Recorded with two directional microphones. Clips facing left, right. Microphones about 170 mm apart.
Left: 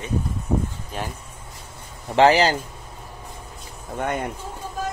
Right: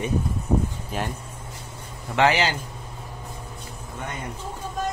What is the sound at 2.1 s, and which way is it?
Speech, 35° left (ahead or behind).